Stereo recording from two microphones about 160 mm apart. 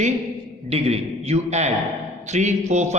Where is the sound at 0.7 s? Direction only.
40° right (ahead or behind).